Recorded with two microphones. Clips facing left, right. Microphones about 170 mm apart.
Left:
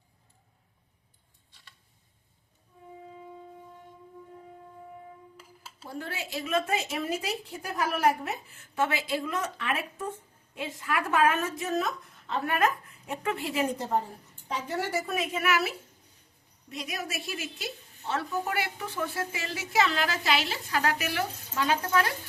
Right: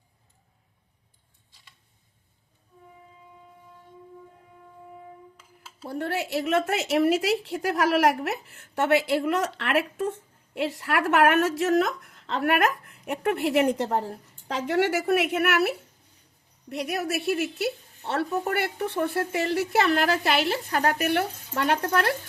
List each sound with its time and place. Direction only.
5.8 s a woman's voice: 65° right (ahead or behind)